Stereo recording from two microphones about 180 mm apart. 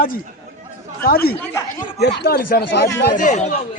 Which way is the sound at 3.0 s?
45° left (ahead or behind).